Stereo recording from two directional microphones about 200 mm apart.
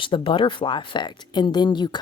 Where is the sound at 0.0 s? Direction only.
25° left (ahead or behind).